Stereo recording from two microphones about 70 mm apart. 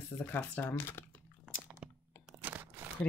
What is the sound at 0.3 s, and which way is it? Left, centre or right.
Speech, left.